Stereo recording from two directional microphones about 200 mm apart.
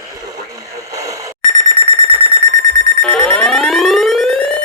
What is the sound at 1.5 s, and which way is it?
Alarm clock, 35° right (ahead or behind).